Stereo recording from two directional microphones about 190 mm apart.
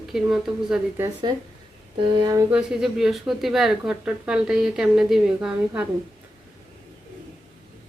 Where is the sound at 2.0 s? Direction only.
20° right (ahead or behind).